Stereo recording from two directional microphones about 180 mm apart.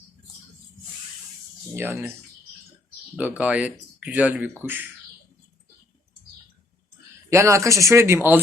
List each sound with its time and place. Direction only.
1.7 s speech: 15° right (ahead or behind)
3.2 s speech: 10° right (ahead or behind)
7.3 s speech: 15° right (ahead or behind)